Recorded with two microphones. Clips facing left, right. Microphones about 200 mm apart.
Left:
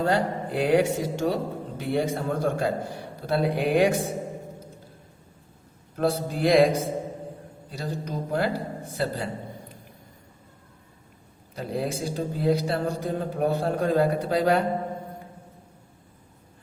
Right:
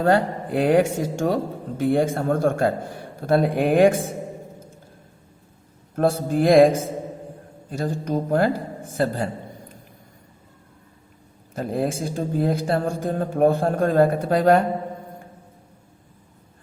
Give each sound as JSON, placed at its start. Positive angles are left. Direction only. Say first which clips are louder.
{"t": 0.0, "sound": "speech", "louder": "right 5 dB", "side_deg": -55}
{"t": 6.0, "sound": "speech", "louder": "right 4 dB", "side_deg": -50}
{"t": 11.5, "sound": "speech", "louder": "right 5 dB", "side_deg": -50}